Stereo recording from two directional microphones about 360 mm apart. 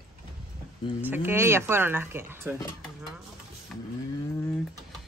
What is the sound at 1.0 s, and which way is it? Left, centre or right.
Speech, centre.